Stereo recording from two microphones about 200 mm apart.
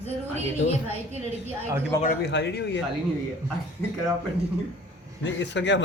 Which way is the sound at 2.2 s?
60° left (ahead or behind).